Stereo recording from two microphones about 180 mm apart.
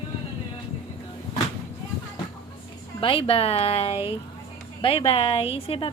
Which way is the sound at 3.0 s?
30° left (ahead or behind).